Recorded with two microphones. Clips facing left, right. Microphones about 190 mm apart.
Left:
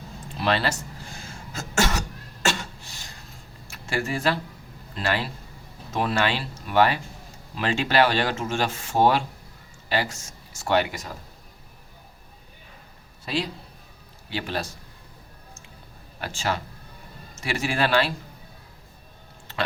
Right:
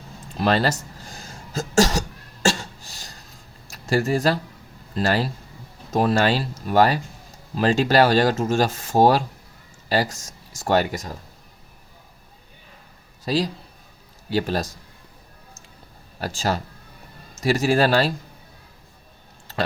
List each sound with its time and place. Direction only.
0.3 s cough: 45° right (ahead or behind)
3.7 s speech: 40° right (ahead or behind)
13.2 s a man's voice: 40° right (ahead or behind)
16.2 s speech: 40° right (ahead or behind)